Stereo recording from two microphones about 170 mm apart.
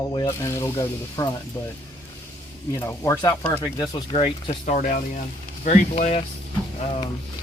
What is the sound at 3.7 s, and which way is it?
Speech, 30° left (ahead or behind).